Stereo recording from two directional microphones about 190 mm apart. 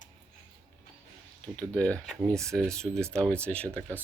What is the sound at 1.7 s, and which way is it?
Speech, 5° left (ahead or behind).